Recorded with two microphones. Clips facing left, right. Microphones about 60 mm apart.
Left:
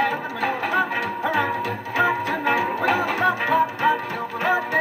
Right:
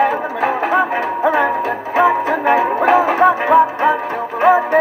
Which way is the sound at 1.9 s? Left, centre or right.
Right.